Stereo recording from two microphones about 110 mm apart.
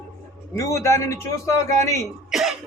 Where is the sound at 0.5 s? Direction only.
30° left (ahead or behind).